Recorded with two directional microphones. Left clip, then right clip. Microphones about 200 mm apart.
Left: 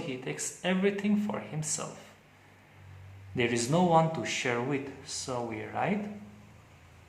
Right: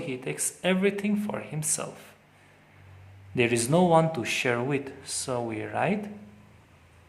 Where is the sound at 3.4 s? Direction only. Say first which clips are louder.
Right 4 dB; 35° right (ahead or behind).